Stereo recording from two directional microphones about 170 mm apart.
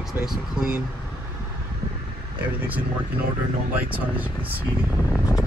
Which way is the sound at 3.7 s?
10° right (ahead or behind).